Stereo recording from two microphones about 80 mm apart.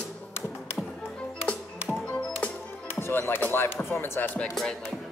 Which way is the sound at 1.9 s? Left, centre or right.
Centre.